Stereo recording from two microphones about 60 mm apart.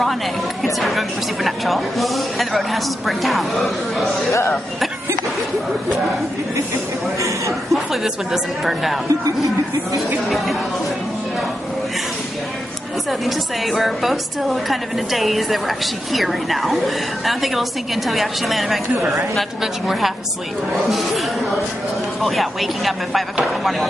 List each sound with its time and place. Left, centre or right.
0.7 s a woman's voice: centre
4.3 s speech: left
7.2 s speech: right
7.7 s a woman's voice: centre
13.2 s a woman's voice: centre